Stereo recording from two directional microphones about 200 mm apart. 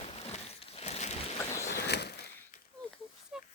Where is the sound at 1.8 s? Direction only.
55° left (ahead or behind).